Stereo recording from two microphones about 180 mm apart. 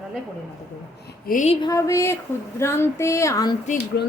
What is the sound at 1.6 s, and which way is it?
A woman's voice, 15° left (ahead or behind).